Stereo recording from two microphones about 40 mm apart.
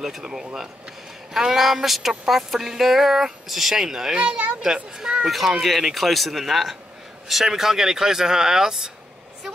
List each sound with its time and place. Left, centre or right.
0.0 s speech: centre
4.2 s a child's voice: right
5.2 s speech: centre